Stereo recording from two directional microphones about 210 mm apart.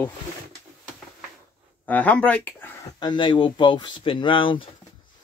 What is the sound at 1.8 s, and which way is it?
Speech, 5° left (ahead or behind).